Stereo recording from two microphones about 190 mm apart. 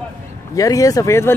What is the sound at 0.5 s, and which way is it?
Speech, 20° left (ahead or behind).